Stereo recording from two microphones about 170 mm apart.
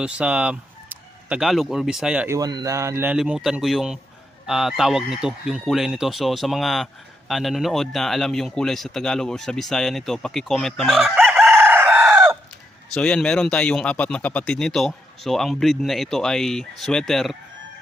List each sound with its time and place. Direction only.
0.0 s speech: 5° right (ahead or behind)
2.2 s speech: 20° right (ahead or behind)
3.2 s speech: 5° right (ahead or behind)
11.6 s chicken: 10° right (ahead or behind)
12.9 s speech: 5° left (ahead or behind)